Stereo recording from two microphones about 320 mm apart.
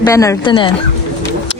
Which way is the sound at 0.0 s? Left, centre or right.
Centre.